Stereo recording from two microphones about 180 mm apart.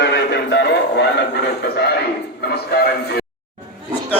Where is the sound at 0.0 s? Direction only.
65° left (ahead or behind).